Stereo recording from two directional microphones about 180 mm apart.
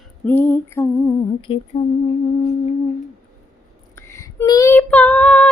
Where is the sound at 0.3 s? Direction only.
10° left (ahead or behind).